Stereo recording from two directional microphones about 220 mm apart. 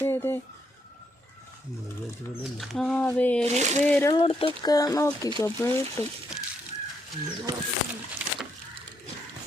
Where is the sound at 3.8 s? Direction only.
10° left (ahead or behind).